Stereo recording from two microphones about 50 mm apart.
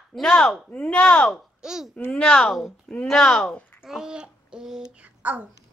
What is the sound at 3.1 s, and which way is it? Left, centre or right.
Speech, centre.